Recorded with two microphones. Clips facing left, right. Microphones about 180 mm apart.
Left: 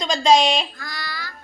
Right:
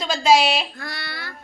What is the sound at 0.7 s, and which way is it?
Child singing, 60° right (ahead or behind).